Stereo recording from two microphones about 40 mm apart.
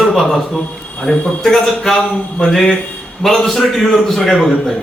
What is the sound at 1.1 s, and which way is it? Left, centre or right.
A man's voice, centre.